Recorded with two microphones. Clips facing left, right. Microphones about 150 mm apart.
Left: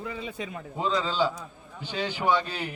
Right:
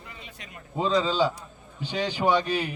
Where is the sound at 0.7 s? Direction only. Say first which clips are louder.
Right 4 dB; 20° right (ahead or behind).